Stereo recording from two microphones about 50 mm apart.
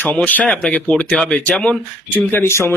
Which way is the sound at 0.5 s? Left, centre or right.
Centre.